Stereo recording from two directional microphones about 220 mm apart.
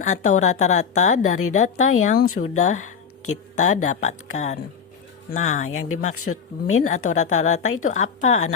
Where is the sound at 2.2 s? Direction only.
75° left (ahead or behind).